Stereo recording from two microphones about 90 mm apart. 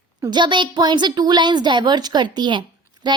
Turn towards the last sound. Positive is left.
turn(degrees=-50)  # may be behind; listen again after turning